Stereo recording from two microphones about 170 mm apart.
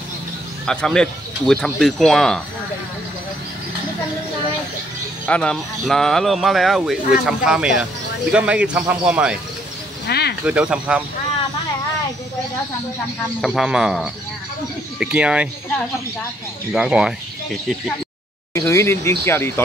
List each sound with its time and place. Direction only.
0.7 s speech: 5° left (ahead or behind)
5.2 s a man's voice: 5° left (ahead or behind)
10.0 s snake: 75° left (ahead or behind)
10.4 s a man's voice: 5° right (ahead or behind)
13.4 s speech: 5° right (ahead or behind)
16.7 s speech: 5° right (ahead or behind)
18.5 s speech: 15° left (ahead or behind)